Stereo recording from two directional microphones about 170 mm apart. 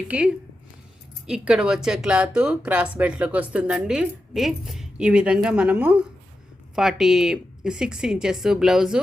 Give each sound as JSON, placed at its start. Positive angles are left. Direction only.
{"t": 0.1, "sound": "speech", "side_deg": -5}